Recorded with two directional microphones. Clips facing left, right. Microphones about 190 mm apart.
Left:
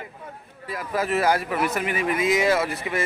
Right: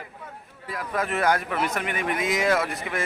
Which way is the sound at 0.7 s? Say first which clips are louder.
Left 3 dB; 5° left (ahead or behind).